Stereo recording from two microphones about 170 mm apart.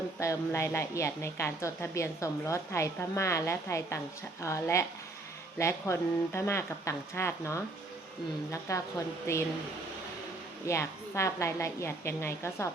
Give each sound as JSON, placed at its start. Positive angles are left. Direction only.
{"t": 0.2, "sound": "a woman's voice", "side_deg": 15}
{"t": 10.7, "sound": "a woman's voice", "side_deg": 15}